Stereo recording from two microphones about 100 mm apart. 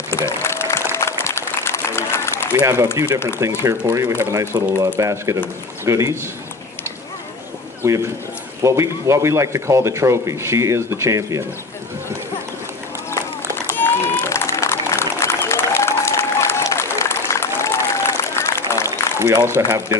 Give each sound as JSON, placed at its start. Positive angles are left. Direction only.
{"t": 0.4, "sound": "music", "side_deg": 25}
{"t": 0.9, "sound": "applause", "side_deg": 25}
{"t": 3.0, "sound": "speech", "side_deg": -30}
{"t": 5.1, "sound": "speech", "side_deg": -30}
{"t": 7.8, "sound": "speech", "side_deg": -30}
{"t": 13.7, "sound": "a sound", "side_deg": 20}
{"t": 18.9, "sound": "speech", "side_deg": -30}